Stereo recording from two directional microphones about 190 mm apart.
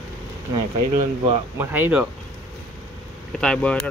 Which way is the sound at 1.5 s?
10° right (ahead or behind).